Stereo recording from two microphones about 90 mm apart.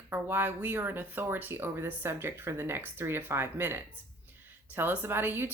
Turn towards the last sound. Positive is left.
turn(degrees=-20)  # may be behind; listen again after turning